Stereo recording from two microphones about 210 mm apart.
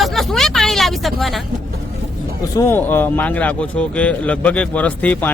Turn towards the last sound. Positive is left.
turn(degrees=5)  # may be behind; listen again after turning